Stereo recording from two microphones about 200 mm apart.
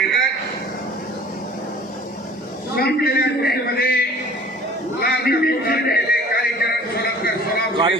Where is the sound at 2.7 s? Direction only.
50° left (ahead or behind).